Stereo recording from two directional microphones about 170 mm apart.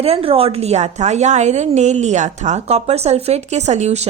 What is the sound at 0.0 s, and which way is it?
A woman's voice, 35° right (ahead or behind).